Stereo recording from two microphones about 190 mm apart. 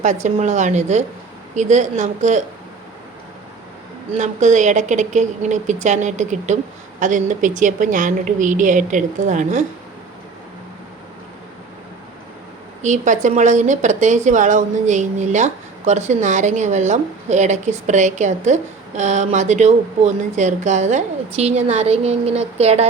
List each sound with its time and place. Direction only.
0.0 s speech: 40° right (ahead or behind)
4.2 s speech: 40° right (ahead or behind)
12.8 s speech: 40° right (ahead or behind)